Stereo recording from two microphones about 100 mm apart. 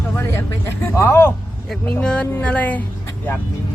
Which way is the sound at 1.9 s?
10° left (ahead or behind).